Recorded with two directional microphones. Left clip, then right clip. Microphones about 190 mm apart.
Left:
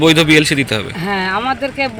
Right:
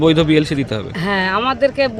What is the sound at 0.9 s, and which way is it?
Speech, 35° right (ahead or behind).